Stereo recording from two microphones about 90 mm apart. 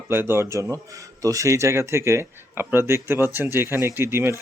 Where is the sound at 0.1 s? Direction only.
25° right (ahead or behind).